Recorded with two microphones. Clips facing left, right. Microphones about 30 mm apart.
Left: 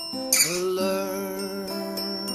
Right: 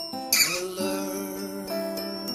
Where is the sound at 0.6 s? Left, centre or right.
Centre.